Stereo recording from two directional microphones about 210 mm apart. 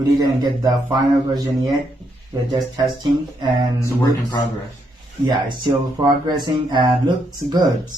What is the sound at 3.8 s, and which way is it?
Speech, 20° left (ahead or behind).